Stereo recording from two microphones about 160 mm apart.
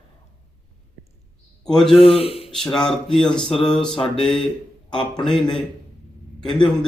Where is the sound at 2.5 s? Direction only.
5° left (ahead or behind).